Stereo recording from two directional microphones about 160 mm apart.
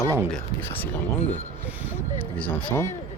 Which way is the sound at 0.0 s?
20° right (ahead or behind).